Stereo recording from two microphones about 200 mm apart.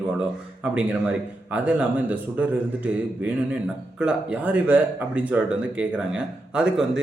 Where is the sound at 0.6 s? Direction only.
5° right (ahead or behind).